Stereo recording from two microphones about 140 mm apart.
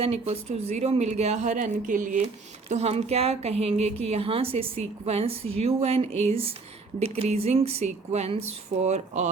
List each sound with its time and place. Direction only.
0.0 s speech: 45° right (ahead or behind); by 2.2 s 65° right (ahead or behind)
2.6 s speech: 50° right (ahead or behind)